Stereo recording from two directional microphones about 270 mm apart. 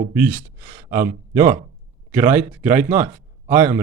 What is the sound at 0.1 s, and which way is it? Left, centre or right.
Speech, centre.